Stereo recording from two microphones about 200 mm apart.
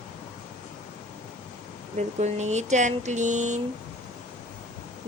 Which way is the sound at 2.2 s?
35° right (ahead or behind).